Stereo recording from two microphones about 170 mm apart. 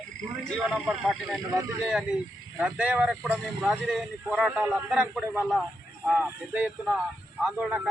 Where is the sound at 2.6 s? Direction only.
5° right (ahead or behind).